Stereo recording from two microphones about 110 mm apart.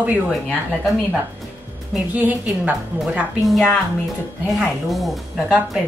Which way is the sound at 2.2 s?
15° right (ahead or behind).